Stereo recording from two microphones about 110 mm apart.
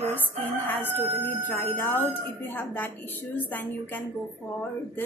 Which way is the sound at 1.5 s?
15° left (ahead or behind).